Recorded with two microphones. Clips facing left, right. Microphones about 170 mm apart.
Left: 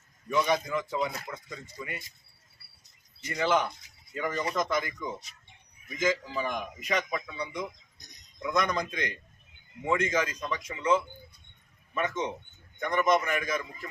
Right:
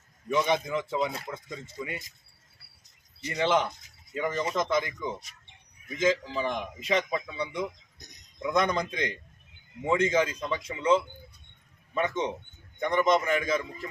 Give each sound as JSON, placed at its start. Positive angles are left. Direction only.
{"t": 0.3, "sound": "speech", "side_deg": -20}
{"t": 3.3, "sound": "speech", "side_deg": -25}